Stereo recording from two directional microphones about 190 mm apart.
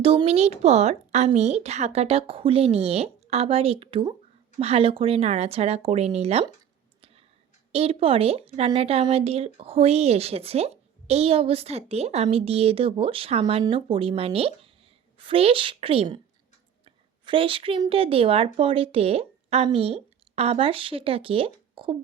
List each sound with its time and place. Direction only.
0.0 s a woman's voice: 30° right (ahead or behind)
7.7 s a woman's voice: 30° right (ahead or behind)